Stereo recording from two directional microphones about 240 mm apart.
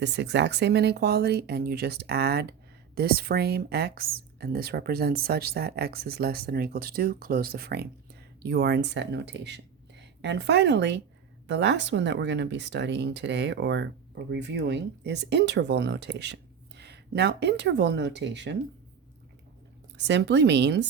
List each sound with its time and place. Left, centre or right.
0.0 s a woman's voice: right
20.1 s speech: right